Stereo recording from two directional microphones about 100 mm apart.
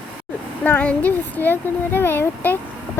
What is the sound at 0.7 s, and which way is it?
Speech, 15° left (ahead or behind).